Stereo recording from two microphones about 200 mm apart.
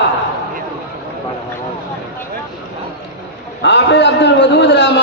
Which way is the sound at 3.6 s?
60° left (ahead or behind).